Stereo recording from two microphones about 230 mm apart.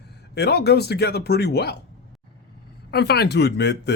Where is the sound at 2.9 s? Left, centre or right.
Left.